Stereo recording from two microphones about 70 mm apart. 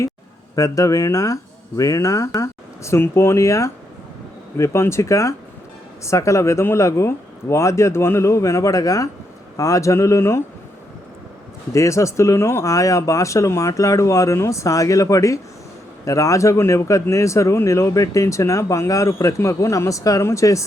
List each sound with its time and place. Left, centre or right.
0.5 s speech: left
11.7 s speech: left